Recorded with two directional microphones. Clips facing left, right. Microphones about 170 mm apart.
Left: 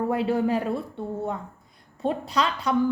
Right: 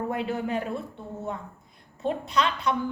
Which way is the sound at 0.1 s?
30° left (ahead or behind).